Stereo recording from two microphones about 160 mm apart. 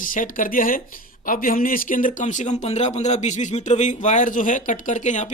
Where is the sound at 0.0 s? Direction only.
55° left (ahead or behind).